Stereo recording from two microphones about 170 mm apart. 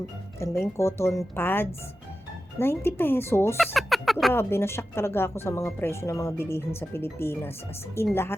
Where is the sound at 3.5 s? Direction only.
Centre (ahead or behind).